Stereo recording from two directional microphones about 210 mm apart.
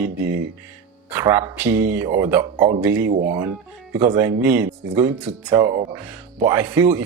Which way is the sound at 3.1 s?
40° right (ahead or behind).